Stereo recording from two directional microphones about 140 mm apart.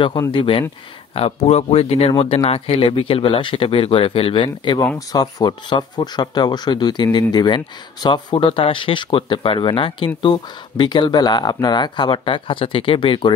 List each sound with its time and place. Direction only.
0.3 s speech: 35° left (ahead or behind)